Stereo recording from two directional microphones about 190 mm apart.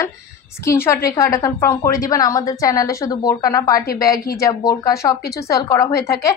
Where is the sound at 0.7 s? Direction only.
15° left (ahead or behind).